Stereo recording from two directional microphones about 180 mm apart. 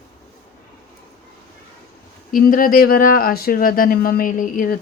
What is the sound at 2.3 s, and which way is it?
Speech, 50° left (ahead or behind).